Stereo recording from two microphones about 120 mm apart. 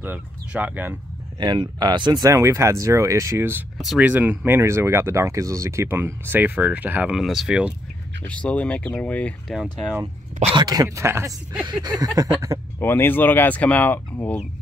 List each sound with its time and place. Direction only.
0.0 s speech: 15° right (ahead or behind)
1.4 s speech: 40° right (ahead or behind)
2.2 s speech: 25° right (ahead or behind)
3.7 s speech: centre (ahead or behind)
4.1 s speech: 15° right (ahead or behind)
8.3 s speech: 10° left (ahead or behind)
10.5 s speech: 35° right (ahead or behind)
11.1 s speech: 20° right (ahead or behind)
11.8 s speech: 35° right (ahead or behind)
12.7 s speech: 20° left (ahead or behind)